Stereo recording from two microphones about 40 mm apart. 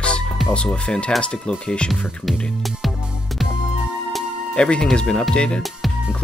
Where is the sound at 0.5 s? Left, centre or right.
Left.